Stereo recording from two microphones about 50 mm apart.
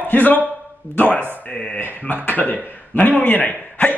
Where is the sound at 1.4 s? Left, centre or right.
Left.